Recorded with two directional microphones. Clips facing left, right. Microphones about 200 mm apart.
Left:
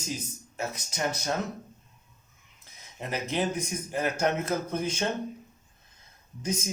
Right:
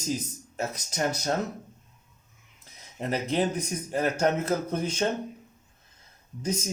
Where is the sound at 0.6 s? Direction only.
40° right (ahead or behind).